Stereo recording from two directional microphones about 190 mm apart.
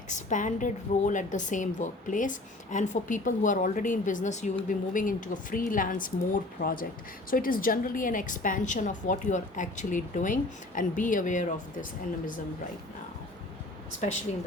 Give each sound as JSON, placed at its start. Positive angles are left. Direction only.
{"t": 0.1, "sound": "a woman's voice", "side_deg": 40}